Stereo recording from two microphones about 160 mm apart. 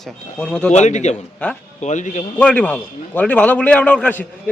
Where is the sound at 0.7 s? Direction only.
45° left (ahead or behind).